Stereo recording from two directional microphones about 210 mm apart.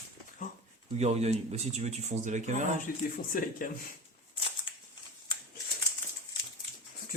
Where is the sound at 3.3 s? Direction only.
40° left (ahead or behind).